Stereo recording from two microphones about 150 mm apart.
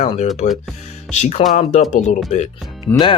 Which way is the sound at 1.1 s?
50° left (ahead or behind).